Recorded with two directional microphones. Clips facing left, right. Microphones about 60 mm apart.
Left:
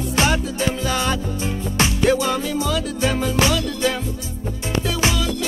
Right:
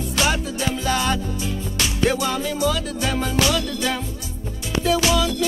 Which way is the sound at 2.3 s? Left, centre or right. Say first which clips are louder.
Left 1 dB; centre.